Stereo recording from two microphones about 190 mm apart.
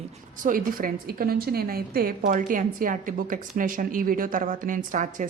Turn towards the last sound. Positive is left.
turn(degrees=-40)  # may be behind; listen again after turning